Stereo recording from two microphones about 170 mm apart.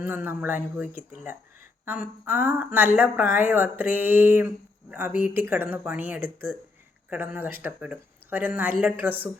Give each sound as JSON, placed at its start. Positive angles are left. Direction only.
{"t": 0.0, "sound": "speech", "side_deg": -10}
{"t": 0.9, "sound": "speech", "side_deg": 45}
{"t": 1.8, "sound": "speech", "side_deg": -10}